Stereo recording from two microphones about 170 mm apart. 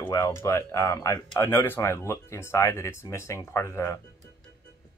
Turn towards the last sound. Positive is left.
turn(degrees=15)  # may be behind; listen again after turning